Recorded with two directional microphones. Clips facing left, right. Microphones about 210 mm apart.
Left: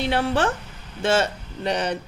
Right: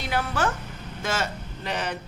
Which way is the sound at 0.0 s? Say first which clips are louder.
Left 5 dB; 30° left (ahead or behind).